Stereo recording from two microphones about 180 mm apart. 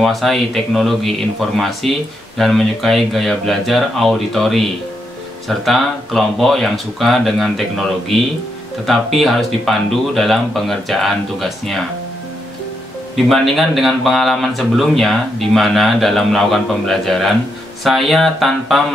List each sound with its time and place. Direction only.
0.0 s speech: centre (ahead or behind)
13.1 s speech: centre (ahead or behind)